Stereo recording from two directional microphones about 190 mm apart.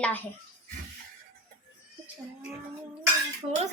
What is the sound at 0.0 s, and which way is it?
Speech, 10° left (ahead or behind).